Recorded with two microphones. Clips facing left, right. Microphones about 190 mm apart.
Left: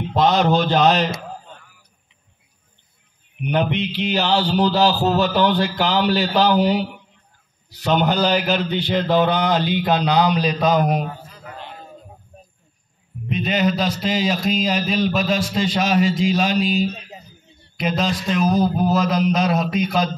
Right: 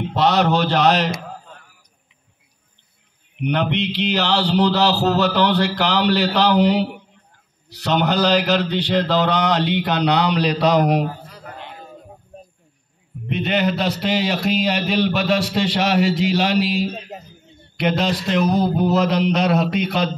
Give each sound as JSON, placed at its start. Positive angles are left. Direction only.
{"t": 0.1, "sound": "mantra", "side_deg": -70}
{"t": 3.3, "sound": "mantra", "side_deg": -75}
{"t": 13.3, "sound": "a man's voice", "side_deg": -65}
{"t": 17.1, "sound": "a sound", "side_deg": -50}
{"t": 17.7, "sound": "a man's voice", "side_deg": -70}